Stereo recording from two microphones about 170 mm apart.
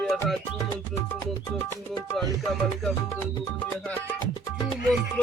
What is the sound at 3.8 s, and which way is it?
Music, 10° left (ahead or behind).